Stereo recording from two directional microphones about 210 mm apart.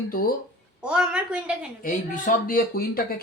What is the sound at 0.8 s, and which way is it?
Speech, 5° right (ahead or behind).